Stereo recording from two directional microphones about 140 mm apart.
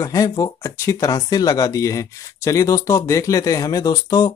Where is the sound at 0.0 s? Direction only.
25° left (ahead or behind).